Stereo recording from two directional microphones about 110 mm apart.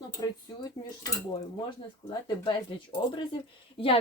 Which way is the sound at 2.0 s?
45° left (ahead or behind).